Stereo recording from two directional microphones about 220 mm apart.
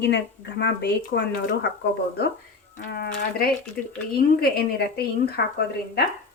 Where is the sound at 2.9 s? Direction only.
45° left (ahead or behind).